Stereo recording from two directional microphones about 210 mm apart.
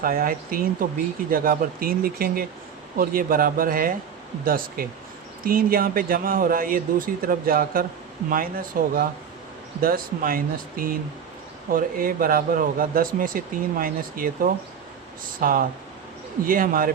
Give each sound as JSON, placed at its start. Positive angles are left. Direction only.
{"t": 0.0, "sound": "a man's voice", "side_deg": -40}